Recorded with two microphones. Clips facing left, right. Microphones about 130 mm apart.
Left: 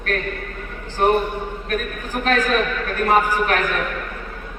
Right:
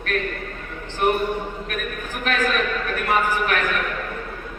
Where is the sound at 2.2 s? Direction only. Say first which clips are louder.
Left 4 dB; 35° left (ahead or behind).